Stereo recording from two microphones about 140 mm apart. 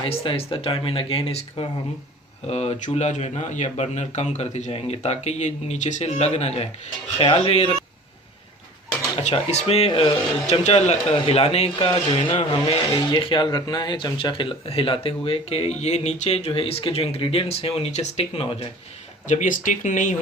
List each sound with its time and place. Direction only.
0.0 s speech: 40° left (ahead or behind)
9.2 s speech: 50° left (ahead or behind)
11.9 s speech: 35° left (ahead or behind)
12.3 s speech: 50° left (ahead or behind)
13.1 s speech: 35° left (ahead or behind)
19.3 s speech: 65° left (ahead or behind)